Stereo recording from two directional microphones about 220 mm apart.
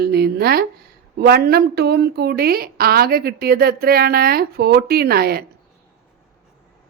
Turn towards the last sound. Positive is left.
turn(degrees=-45)  # may be behind; listen again after turning